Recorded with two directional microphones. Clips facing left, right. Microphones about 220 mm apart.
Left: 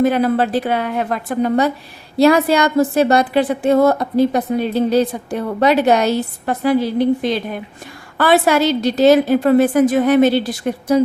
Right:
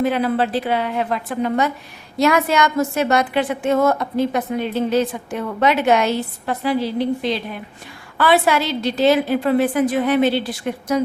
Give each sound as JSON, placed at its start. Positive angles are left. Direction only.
{"t": 0.0, "sound": "a woman's voice", "side_deg": 45}